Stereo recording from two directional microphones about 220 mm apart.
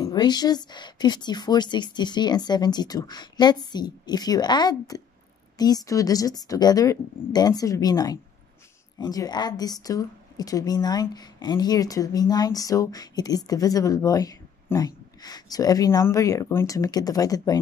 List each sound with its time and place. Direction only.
0.0 s a woman's voice: 20° left (ahead or behind)